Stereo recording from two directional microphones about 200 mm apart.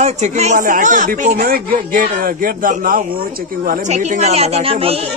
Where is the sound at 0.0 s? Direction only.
35° right (ahead or behind).